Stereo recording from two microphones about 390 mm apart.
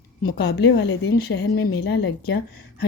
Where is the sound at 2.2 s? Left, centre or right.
Left.